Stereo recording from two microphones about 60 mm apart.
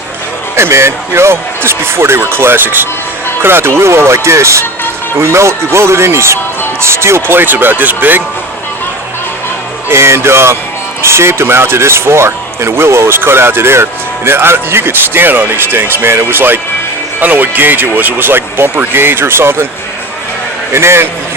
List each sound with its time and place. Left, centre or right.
0.5 s speech: right
9.9 s speech: right
20.7 s speech: right